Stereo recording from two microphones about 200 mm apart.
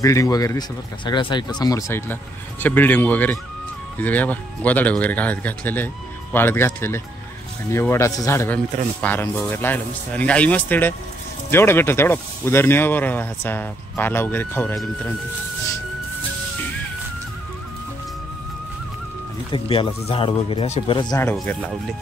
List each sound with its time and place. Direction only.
0.0 s speech: 15° left (ahead or behind)
19.5 s speech: 25° left (ahead or behind)
21.0 s speech: 15° left (ahead or behind)